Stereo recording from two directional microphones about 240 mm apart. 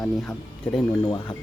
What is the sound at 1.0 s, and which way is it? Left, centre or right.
Speech, centre.